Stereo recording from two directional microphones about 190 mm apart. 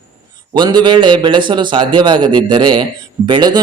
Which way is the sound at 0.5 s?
25° right (ahead or behind).